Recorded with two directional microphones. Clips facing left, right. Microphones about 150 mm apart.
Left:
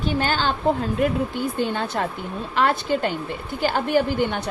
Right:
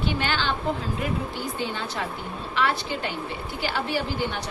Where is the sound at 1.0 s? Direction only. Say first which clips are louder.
Left 7 dB; 55° left (ahead or behind).